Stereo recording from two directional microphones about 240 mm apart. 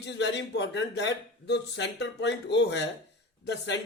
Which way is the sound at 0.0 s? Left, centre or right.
Left.